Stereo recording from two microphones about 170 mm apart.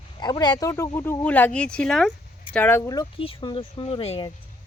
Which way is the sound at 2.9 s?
25° left (ahead or behind).